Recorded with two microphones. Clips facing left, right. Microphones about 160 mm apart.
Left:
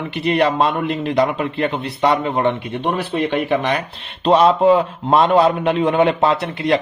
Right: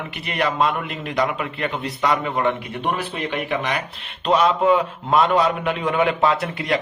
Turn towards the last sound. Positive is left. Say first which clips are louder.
# left 3 dB
turn(degrees=30)  # may be behind; listen again after turning